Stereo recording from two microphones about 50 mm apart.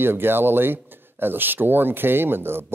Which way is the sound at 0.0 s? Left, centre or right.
Right.